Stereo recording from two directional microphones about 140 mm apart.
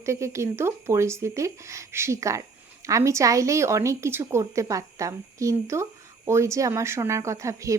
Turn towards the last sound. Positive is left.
turn(degrees=-20)  # may be behind; listen again after turning